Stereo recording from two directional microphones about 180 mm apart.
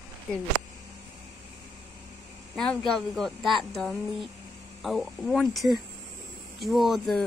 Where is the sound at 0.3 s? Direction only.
5° left (ahead or behind).